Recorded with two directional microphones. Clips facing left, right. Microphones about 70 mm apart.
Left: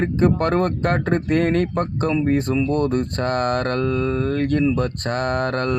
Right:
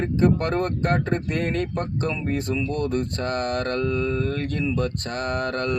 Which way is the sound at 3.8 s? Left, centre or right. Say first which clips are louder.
Left 3 dB; left.